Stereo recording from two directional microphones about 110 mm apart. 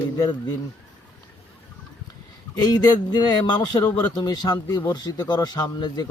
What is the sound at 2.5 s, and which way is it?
Speech, 35° left (ahead or behind).